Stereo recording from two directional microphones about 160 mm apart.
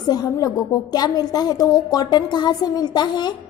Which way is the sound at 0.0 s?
25° left (ahead or behind).